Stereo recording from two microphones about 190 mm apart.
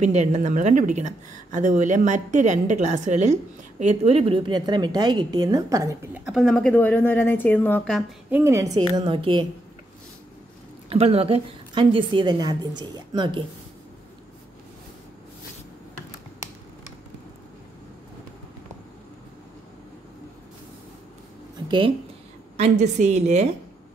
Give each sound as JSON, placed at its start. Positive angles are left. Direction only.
{"t": 0.0, "sound": "a woman's voice", "side_deg": -35}
{"t": 6.2, "sound": "speech", "side_deg": 0}
{"t": 8.3, "sound": "a woman's voice", "side_deg": -10}
{"t": 10.9, "sound": "a woman's voice", "side_deg": -30}
{"t": 21.6, "sound": "speech", "side_deg": -25}
{"t": 22.6, "sound": "speech", "side_deg": -35}